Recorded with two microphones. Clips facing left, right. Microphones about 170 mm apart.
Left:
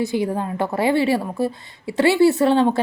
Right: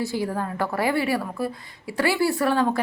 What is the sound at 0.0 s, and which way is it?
A woman's voice, 20° left (ahead or behind).